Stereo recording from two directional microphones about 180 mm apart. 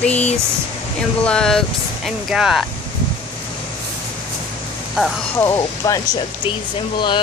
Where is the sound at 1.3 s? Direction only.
5° left (ahead or behind).